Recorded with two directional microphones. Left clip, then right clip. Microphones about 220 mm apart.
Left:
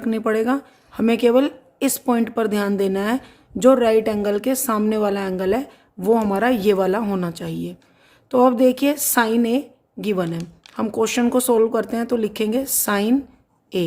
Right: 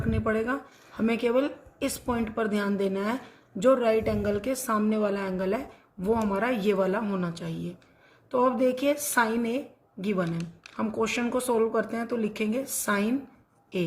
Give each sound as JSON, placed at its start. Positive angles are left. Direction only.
{"t": 0.1, "sound": "a woman's voice", "side_deg": 45}